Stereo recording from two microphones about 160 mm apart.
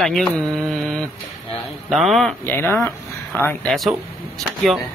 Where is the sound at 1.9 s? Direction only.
Centre (ahead or behind).